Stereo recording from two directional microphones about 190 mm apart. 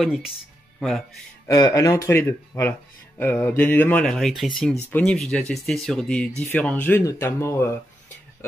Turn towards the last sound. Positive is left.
turn(degrees=15)  # may be behind; listen again after turning